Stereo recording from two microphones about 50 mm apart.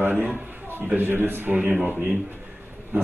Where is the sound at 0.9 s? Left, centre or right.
Right.